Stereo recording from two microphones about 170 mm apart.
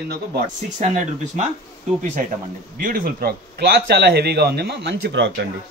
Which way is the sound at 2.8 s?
55° right (ahead or behind).